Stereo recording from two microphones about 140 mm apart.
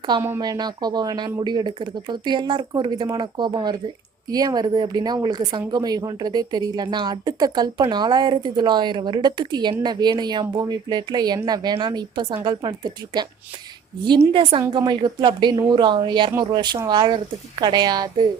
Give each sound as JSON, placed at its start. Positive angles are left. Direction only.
{"t": 0.2, "sound": "speech", "side_deg": -25}
{"t": 14.7, "sound": "speech", "side_deg": -30}